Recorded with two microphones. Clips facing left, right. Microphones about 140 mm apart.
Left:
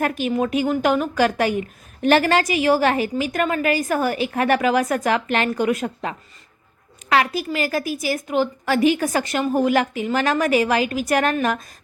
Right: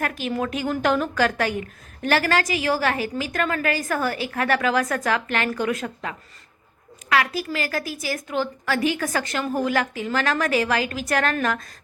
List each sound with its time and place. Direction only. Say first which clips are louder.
0.0 s a woman's voice: left 5 dB; 20° left (ahead or behind)